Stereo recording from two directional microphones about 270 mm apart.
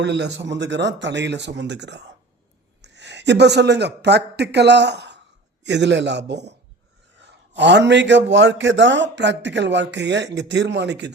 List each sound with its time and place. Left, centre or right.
0.0 s a man's voice: right